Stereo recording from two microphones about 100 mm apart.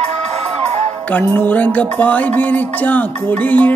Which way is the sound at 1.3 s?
15° left (ahead or behind).